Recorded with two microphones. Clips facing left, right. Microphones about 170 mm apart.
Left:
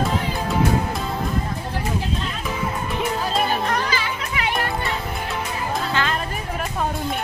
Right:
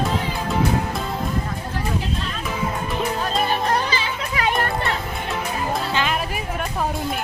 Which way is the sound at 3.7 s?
30° right (ahead or behind).